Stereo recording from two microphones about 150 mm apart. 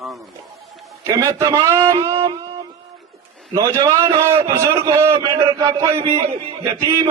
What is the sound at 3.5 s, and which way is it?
A man's voice, 25° right (ahead or behind).